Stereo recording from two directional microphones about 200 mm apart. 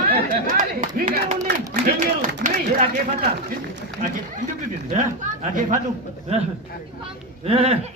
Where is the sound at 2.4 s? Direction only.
55° right (ahead or behind).